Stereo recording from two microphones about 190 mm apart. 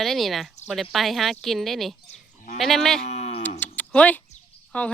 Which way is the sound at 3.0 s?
35° left (ahead or behind).